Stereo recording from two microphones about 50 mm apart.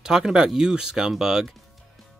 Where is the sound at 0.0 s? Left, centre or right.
Centre.